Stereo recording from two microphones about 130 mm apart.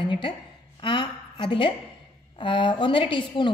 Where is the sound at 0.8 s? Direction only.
40° left (ahead or behind).